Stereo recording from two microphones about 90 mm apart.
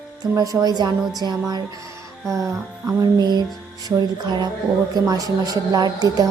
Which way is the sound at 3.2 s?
50° right (ahead or behind).